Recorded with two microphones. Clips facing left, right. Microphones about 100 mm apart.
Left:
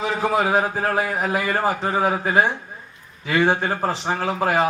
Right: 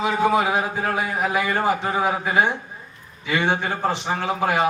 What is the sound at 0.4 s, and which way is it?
A man's voice, 35° left (ahead or behind).